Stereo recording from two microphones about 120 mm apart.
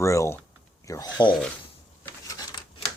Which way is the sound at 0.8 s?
25° left (ahead or behind).